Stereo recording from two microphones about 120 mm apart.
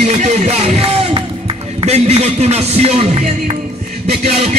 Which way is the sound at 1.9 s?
60° right (ahead or behind).